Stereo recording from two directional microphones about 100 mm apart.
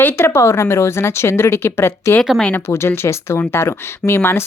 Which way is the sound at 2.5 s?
25° left (ahead or behind).